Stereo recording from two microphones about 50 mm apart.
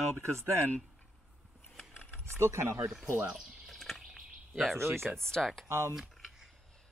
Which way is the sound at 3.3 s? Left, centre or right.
Centre.